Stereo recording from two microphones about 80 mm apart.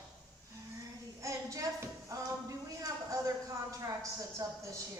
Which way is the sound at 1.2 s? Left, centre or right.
Right.